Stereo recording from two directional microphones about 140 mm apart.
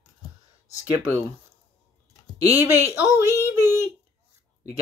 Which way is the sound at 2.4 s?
15° right (ahead or behind).